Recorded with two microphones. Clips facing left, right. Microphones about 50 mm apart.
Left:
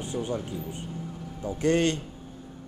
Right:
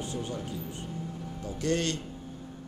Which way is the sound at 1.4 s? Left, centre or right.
Left.